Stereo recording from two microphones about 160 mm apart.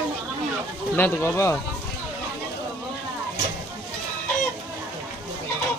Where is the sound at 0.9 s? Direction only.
15° left (ahead or behind).